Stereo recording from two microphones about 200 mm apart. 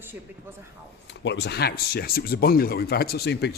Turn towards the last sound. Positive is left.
turn(degrees=55)  # may be behind; listen again after turning